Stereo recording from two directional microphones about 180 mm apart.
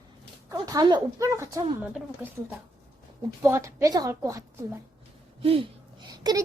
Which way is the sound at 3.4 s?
15° right (ahead or behind).